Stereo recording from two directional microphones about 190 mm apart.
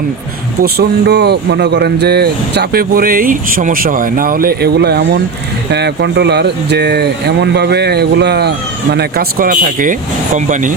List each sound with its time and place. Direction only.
0.6 s speech: 55° right (ahead or behind)